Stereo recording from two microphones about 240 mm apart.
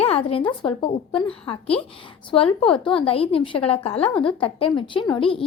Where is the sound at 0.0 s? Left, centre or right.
Left.